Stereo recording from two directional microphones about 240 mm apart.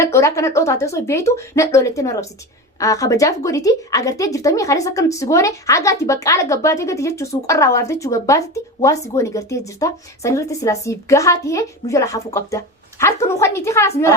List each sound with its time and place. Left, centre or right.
0.0 s a woman's voice: centre